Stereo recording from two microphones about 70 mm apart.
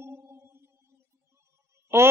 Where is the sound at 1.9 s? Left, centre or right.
Right.